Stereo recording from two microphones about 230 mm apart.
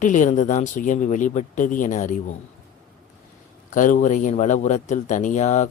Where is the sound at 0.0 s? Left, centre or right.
Left.